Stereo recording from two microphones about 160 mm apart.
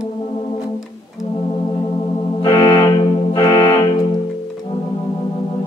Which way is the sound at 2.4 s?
25° left (ahead or behind).